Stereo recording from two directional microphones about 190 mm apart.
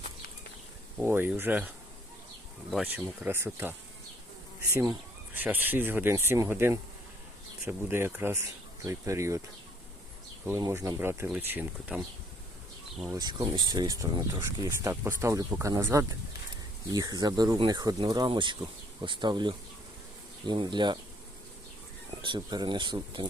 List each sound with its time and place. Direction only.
0.9 s speech: 10° right (ahead or behind)
10.4 s speech: 15° right (ahead or behind)
13.1 s speech: 20° right (ahead or behind)
22.2 s speech: 25° right (ahead or behind)